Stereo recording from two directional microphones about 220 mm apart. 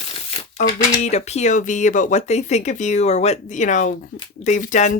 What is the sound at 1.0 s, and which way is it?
Speech, 30° left (ahead or behind).